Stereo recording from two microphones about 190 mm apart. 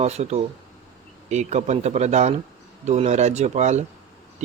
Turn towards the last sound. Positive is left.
turn(degrees=-35)  # may be behind; listen again after turning